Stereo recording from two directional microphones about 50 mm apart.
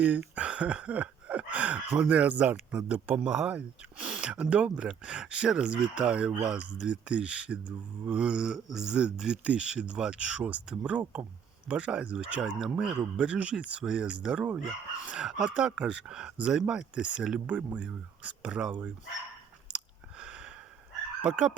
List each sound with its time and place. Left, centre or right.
0.3 s speech: right
20.1 s a sound: centre
21.2 s speech: right